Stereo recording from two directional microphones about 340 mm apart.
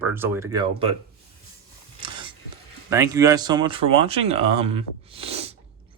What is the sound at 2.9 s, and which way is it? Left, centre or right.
A man's voice, centre.